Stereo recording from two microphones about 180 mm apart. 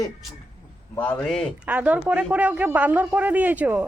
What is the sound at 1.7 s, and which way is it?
Speech, 10° right (ahead or behind).